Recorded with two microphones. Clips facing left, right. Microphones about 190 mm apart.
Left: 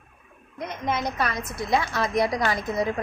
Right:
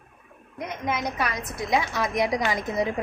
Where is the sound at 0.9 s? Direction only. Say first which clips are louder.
Left 1 dB; 10° right (ahead or behind).